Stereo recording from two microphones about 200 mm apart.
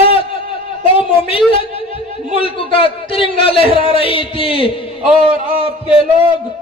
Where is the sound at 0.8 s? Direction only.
25° left (ahead or behind).